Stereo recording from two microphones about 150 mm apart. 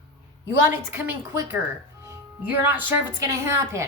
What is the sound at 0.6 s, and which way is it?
A woman's voice, 15° right (ahead or behind).